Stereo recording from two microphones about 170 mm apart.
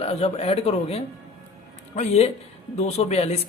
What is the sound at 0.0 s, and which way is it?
Speech, 40° left (ahead or behind).